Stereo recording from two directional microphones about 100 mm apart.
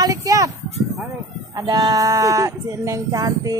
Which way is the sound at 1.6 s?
45° right (ahead or behind).